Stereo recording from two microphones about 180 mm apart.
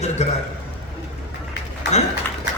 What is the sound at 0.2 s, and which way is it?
Speech, 40° left (ahead or behind).